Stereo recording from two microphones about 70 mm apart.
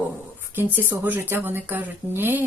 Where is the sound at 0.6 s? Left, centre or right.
Right.